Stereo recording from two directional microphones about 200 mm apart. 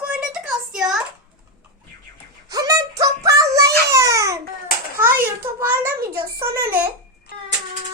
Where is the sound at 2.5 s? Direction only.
20° right (ahead or behind).